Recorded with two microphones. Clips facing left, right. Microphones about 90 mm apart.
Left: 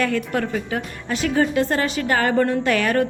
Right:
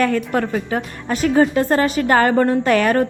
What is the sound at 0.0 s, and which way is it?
A woman's voice, 45° right (ahead or behind).